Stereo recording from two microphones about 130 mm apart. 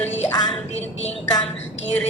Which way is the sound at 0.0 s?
55° left (ahead or behind).